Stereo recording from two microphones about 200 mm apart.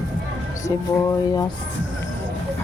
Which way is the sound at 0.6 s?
15° left (ahead or behind).